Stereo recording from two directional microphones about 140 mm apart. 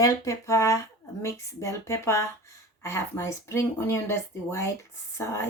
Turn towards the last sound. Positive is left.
turn(degrees=20)  # may be behind; listen again after turning